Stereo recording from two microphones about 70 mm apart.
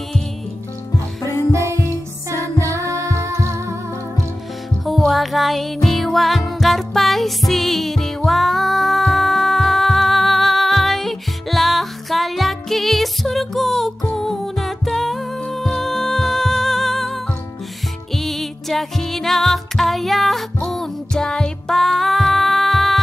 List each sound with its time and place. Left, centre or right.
1.2 s music: left
1.5 s music: right
4.8 s music: centre